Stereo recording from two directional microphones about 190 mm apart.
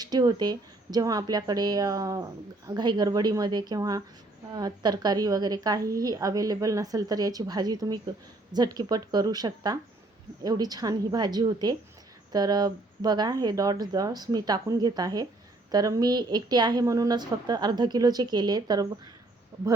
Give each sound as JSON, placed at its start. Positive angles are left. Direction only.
{"t": 0.0, "sound": "a woman's voice", "side_deg": -20}